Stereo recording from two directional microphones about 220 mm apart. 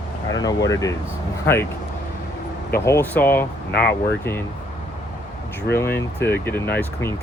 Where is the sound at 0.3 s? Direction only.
15° left (ahead or behind).